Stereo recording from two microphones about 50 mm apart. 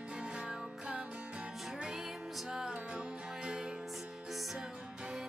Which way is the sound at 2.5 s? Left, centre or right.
Centre.